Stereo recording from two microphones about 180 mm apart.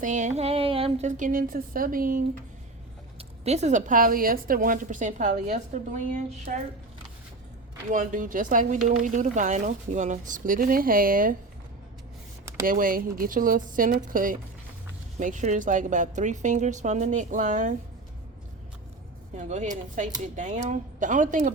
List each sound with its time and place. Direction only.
0.0 s a woman's voice: 45° right (ahead or behind)
3.2 s a woman's voice: 35° right (ahead or behind)
7.9 s a woman's voice: 45° right (ahead or behind)
12.6 s a woman's voice: 50° right (ahead or behind)
19.4 s a woman's voice: 45° right (ahead or behind)